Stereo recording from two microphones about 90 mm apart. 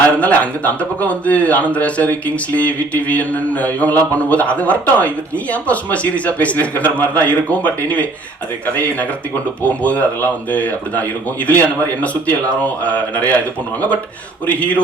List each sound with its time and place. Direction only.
0.2 s speech: 15° left (ahead or behind)
9.6 s speech: 15° left (ahead or behind)
14.4 s speech: 15° left (ahead or behind)